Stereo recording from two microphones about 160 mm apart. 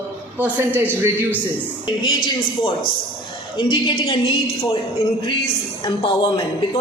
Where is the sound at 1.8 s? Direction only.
30° left (ahead or behind).